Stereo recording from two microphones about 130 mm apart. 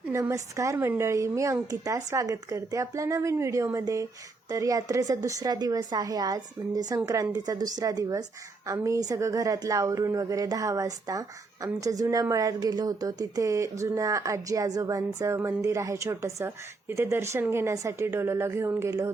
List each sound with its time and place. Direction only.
0.1 s a woman's voice: 20° right (ahead or behind)